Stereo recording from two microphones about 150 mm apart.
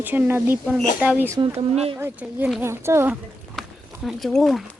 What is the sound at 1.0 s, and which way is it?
Speech, 10° right (ahead or behind).